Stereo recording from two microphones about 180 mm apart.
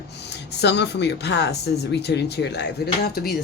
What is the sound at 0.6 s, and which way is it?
Speech, 70° left (ahead or behind).